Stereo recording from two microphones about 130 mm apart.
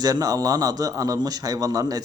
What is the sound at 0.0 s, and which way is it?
Speech, 30° right (ahead or behind).